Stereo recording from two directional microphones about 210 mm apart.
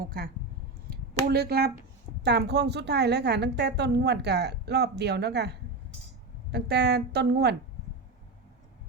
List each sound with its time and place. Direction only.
0.0 s a woman's voice: 45° right (ahead or behind)